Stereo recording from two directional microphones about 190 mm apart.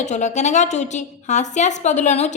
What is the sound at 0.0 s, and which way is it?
A woman's voice, 40° left (ahead or behind).